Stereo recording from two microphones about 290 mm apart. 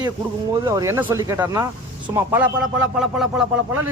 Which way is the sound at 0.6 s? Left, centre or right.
Centre.